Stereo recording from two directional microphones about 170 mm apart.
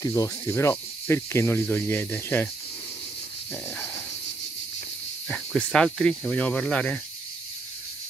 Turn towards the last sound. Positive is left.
turn(degrees=10)  # may be behind; listen again after turning